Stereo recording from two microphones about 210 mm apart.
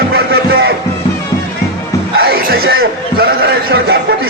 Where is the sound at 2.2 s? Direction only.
45° right (ahead or behind).